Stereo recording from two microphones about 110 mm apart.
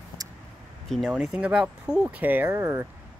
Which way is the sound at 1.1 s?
10° right (ahead or behind).